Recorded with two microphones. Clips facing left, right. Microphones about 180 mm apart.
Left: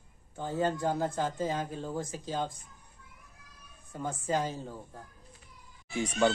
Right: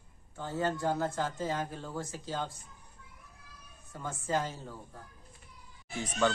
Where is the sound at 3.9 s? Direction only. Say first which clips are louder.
Left 2 dB; 15° left (ahead or behind).